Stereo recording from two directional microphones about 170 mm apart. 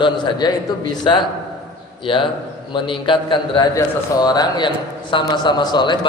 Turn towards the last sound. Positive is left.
turn(degrees=25)  # may be behind; listen again after turning